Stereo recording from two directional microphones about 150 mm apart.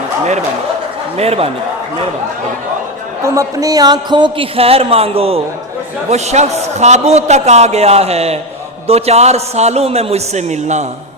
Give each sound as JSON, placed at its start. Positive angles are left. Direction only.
{"t": 1.1, "sound": "a man's voice", "side_deg": -45}
{"t": 3.2, "sound": "a man's voice", "side_deg": -20}